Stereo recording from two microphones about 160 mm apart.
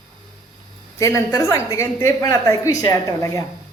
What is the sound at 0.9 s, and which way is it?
A woman's voice, 20° left (ahead or behind).